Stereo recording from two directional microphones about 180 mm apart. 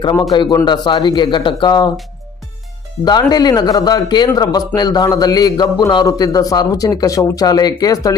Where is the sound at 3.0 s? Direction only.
20° left (ahead or behind).